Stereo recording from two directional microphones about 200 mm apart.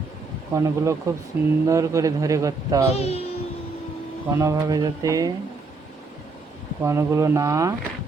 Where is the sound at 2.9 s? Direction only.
30° left (ahead or behind).